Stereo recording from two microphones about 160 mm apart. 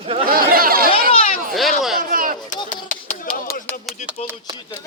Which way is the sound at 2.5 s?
55° left (ahead or behind).